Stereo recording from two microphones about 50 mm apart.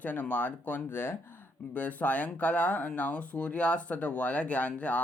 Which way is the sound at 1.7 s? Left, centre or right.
Left.